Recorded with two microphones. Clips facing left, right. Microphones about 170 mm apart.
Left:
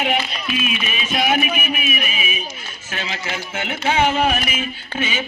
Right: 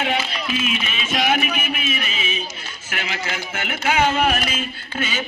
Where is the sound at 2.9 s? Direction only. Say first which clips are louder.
Even; 20° left (ahead or behind).